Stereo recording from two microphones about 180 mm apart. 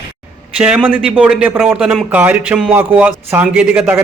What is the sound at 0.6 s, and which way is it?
A man's voice, 10° right (ahead or behind).